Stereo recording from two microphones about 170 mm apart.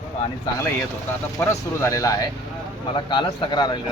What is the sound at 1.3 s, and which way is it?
A man's voice, 15° left (ahead or behind).